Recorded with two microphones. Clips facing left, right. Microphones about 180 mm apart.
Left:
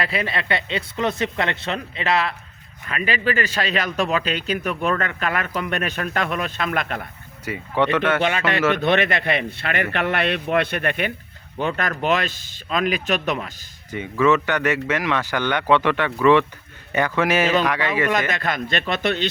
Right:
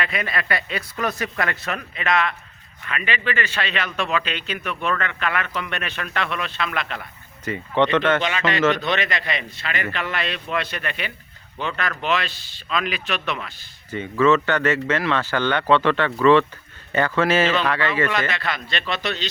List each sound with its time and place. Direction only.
0.0 s a man's voice: 30° left (ahead or behind); by 7.1 s 50° left (ahead or behind)
7.4 s speech: 10° left (ahead or behind)
8.7 s speech: 55° left (ahead or behind)
13.9 s speech: 15° left (ahead or behind)
18.3 s speech: 45° left (ahead or behind)